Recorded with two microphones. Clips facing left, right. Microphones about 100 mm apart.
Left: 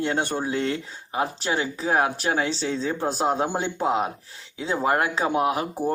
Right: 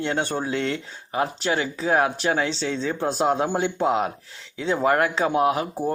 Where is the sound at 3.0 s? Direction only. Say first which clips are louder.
Right 2 dB; 10° left (ahead or behind).